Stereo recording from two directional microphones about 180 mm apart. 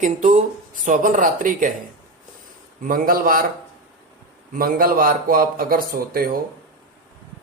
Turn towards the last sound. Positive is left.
turn(degrees=-55)  # may be behind; listen again after turning